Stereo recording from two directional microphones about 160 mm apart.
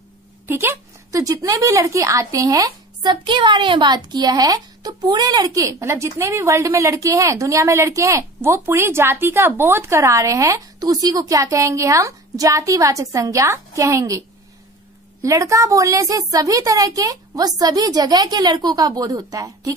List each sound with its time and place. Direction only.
0.5 s a woman's voice: 15° right (ahead or behind)
15.2 s a woman's voice: 20° right (ahead or behind)